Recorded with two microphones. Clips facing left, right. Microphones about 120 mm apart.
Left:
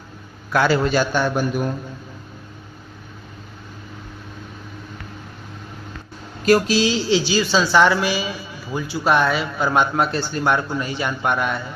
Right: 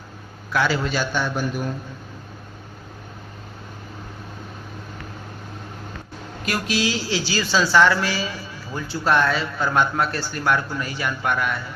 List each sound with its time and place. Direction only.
0.5 s a man's voice: 50° left (ahead or behind)
6.4 s a man's voice: 35° left (ahead or behind)